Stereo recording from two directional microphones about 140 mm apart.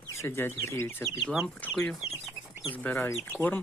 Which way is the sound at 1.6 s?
5° left (ahead or behind).